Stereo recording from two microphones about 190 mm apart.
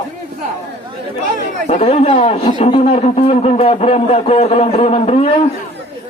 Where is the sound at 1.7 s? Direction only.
35° left (ahead or behind).